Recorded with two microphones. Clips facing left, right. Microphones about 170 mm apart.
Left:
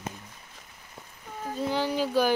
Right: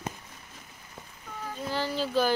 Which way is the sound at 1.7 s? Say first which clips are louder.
Left 2 dB; 15° left (ahead or behind).